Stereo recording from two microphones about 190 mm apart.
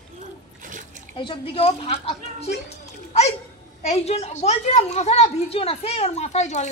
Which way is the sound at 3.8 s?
35° left (ahead or behind).